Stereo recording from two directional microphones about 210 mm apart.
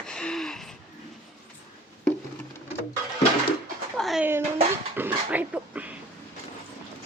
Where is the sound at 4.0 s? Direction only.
Centre (ahead or behind).